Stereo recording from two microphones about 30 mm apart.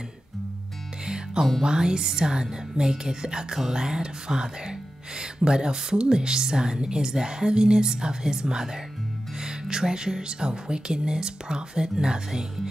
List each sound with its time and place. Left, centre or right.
1.0 s music: right
1.6 s speech: right